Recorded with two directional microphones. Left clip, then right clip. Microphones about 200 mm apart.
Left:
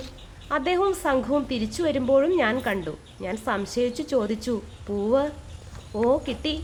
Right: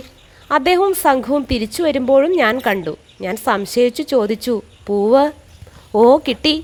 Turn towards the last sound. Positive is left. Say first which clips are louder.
# right 11 dB
turn(degrees=-50)  # may be behind; listen again after turning